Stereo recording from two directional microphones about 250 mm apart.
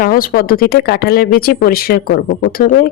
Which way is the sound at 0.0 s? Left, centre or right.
Left.